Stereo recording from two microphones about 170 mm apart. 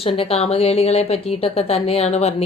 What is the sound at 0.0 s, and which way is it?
Speech, 35° left (ahead or behind).